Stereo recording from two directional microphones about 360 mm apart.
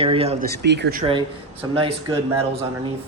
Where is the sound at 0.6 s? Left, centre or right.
Right.